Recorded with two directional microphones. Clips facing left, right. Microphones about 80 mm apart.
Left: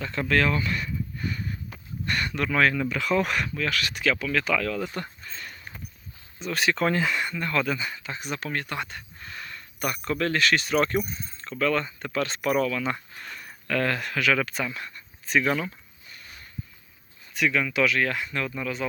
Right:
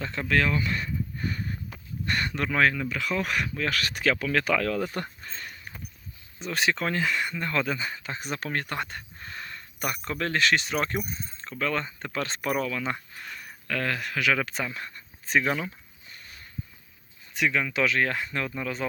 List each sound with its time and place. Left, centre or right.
0.1 s speech: centre
0.7 s a sound: right
2.0 s speech: right
2.5 s speech: centre
2.9 s speech: centre
3.7 s speech: right
6.4 s speech: right
6.7 s speech: centre
7.3 s speech: right
10.8 s speech: centre
11.3 s speech: right
13.2 s speech: centre
14.2 s speech: centre
17.3 s speech: right